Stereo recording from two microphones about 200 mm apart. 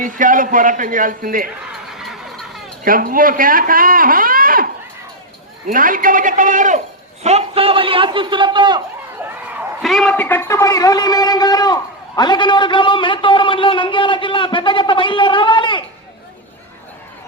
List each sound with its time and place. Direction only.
0.0 s a man's voice: 40° right (ahead or behind)
2.8 s speech: 45° right (ahead or behind)
5.7 s a man's voice: 45° right (ahead or behind); by 8.8 s 20° right (ahead or behind)
9.8 s a man's voice: centre (ahead or behind); by 15.8 s 25° left (ahead or behind)